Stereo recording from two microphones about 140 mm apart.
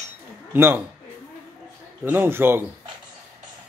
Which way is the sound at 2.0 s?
15° right (ahead or behind).